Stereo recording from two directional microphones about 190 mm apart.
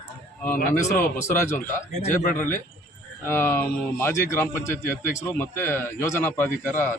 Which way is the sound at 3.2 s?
10° left (ahead or behind).